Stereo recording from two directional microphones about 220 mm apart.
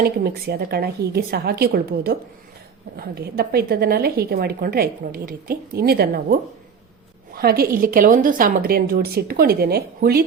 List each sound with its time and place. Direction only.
0.0 s a woman's voice: 45° right (ahead or behind)
7.3 s a woman's voice: 45° right (ahead or behind)